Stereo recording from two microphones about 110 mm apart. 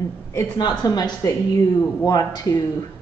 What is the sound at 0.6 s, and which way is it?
A woman's voice, 35° left (ahead or behind).